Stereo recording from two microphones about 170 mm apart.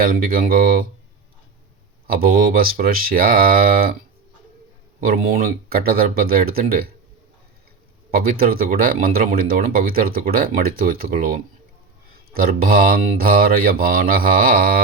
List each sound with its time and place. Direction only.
0.0 s speech: 55° right (ahead or behind)
2.0 s speech: 60° right (ahead or behind)
5.0 s speech: 60° right (ahead or behind)
8.1 s speech: 60° right (ahead or behind)